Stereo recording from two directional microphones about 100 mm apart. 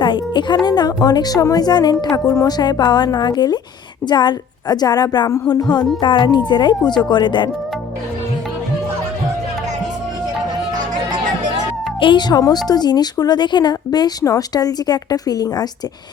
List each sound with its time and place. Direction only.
0.0 s speech: 50° left (ahead or behind)
11.9 s speech: 55° left (ahead or behind)
12.4 s speech: 40° left (ahead or behind)